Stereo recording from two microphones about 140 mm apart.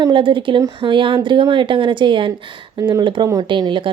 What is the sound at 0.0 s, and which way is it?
Speech, 35° right (ahead or behind).